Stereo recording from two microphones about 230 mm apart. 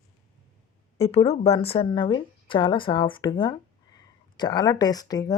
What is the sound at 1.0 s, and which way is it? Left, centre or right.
A woman's voice, left.